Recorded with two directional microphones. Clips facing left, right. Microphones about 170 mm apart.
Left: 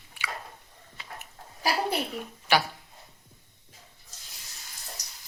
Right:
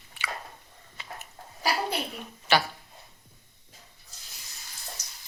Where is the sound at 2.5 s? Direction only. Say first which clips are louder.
Even; 15° left (ahead or behind).